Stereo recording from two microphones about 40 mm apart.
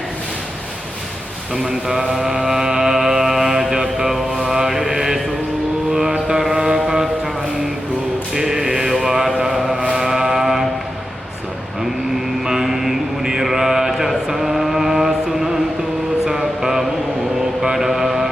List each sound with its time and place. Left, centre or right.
1.9 s mantra: centre
8.3 s mantra: centre
9.9 s a sound: centre
12.5 s mantra: centre
16.3 s a sound: centre
17.6 s mantra: centre